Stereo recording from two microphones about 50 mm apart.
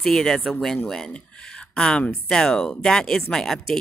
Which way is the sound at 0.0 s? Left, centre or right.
Centre.